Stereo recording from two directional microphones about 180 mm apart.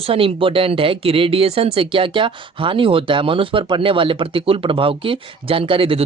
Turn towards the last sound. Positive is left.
turn(degrees=-30)  # may be behind; listen again after turning